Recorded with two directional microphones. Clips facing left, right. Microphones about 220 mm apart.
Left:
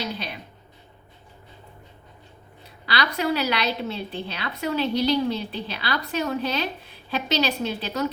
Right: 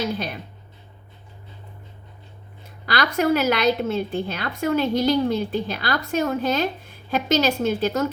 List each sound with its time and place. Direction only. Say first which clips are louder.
2.8 s a woman's voice: right 4 dB; 45° right (ahead or behind)